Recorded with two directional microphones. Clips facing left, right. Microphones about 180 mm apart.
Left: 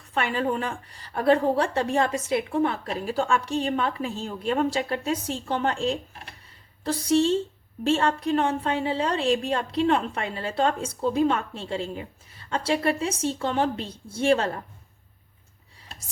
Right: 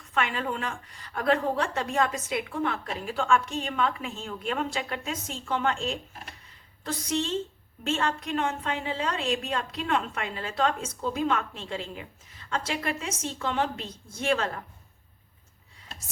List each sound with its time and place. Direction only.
0.1 s a woman's voice: 35° left (ahead or behind)